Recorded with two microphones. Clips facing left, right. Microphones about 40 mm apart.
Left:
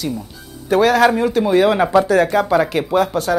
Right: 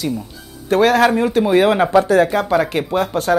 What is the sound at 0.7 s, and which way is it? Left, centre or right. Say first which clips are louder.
Speech: even; centre.